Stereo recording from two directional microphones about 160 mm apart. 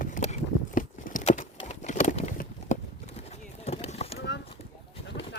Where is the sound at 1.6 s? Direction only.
50° left (ahead or behind).